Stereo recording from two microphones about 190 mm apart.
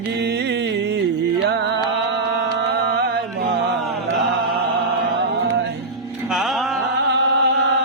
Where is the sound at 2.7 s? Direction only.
55° right (ahead or behind).